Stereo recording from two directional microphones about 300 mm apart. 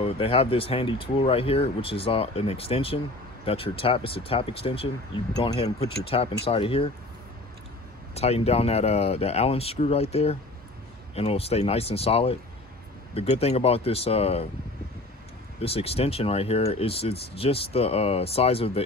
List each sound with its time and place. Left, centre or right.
0.0 s speech: centre
8.1 s speech: left
15.6 s speech: centre